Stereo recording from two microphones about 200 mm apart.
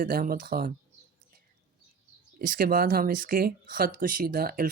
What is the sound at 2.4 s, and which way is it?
Speech, 45° right (ahead or behind).